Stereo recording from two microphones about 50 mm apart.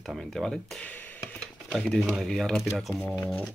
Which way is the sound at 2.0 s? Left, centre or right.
Centre.